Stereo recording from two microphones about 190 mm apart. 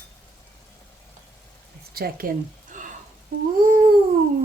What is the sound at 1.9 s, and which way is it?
Speech, 55° right (ahead or behind).